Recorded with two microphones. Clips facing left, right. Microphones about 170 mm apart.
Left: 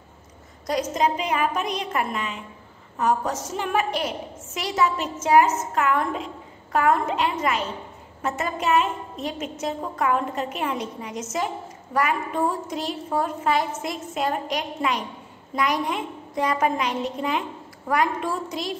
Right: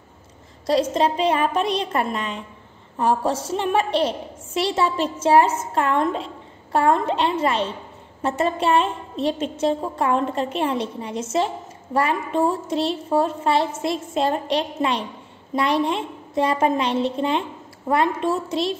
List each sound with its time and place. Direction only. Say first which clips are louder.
0.7 s a woman's voice: right 4 dB; 30° right (ahead or behind)